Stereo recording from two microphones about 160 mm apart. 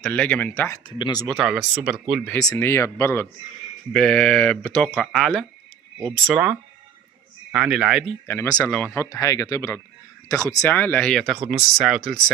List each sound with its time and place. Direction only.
0.0 s speech: 10° left (ahead or behind)
0.8 s speech: 30° left (ahead or behind)
1.2 s speech: centre (ahead or behind)
2.4 s speech: 15° left (ahead or behind)
3.9 s speech: 5° left (ahead or behind)
7.5 s speech: 5° right (ahead or behind)
8.3 s speech: 15° left (ahead or behind)
10.6 s speech: 10° left (ahead or behind)